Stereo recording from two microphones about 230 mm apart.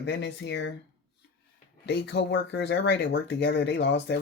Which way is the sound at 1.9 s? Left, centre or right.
Left.